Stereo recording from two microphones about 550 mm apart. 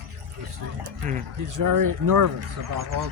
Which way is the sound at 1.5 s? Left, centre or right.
Right.